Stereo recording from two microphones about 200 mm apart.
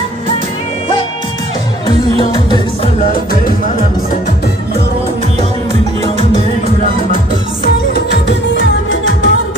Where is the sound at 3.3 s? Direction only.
40° left (ahead or behind).